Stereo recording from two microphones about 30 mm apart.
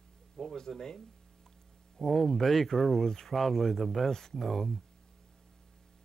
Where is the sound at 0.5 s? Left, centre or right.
Centre.